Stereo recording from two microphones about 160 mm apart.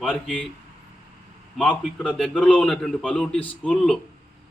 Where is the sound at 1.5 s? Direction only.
5° left (ahead or behind).